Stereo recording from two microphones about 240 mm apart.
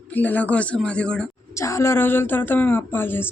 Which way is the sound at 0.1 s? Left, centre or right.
Centre.